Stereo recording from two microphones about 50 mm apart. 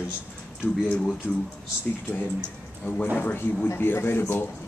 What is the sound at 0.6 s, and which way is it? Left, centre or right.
Speech, left.